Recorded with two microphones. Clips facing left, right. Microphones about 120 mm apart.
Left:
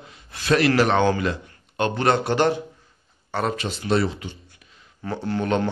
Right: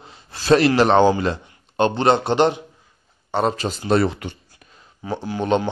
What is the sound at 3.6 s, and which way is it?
Speech, 40° right (ahead or behind).